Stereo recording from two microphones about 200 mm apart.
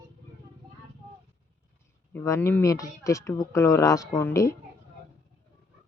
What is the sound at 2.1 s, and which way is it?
Speech, 15° left (ahead or behind).